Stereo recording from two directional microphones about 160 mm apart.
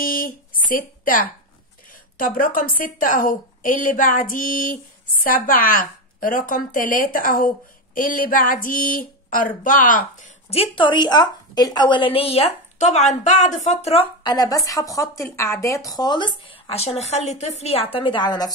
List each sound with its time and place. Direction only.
0.0 s a sound: 60° left (ahead or behind)
0.7 s a woman's voice: 60° left (ahead or behind)
10.5 s a woman's voice: 35° left (ahead or behind)
14.2 s speech: 25° left (ahead or behind)